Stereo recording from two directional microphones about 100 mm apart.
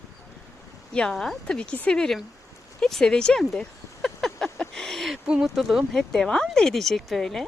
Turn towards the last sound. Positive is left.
turn(degrees=5)  # may be behind; listen again after turning